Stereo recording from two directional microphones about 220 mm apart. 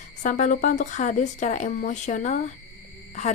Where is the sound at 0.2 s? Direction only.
35° left (ahead or behind).